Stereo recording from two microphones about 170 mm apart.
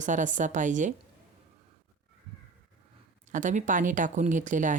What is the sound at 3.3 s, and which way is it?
Speech, 45° right (ahead or behind).